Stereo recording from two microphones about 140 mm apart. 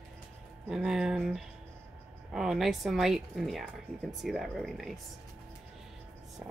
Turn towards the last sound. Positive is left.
turn(degrees=0)  # may be behind; listen again after turning